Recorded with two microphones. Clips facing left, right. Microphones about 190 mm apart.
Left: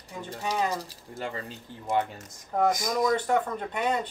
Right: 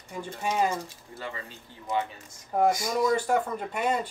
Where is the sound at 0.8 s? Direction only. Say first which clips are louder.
Left 2 dB; 35° left (ahead or behind).